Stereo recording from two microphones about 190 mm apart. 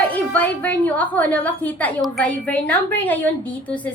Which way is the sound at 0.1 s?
10° left (ahead or behind).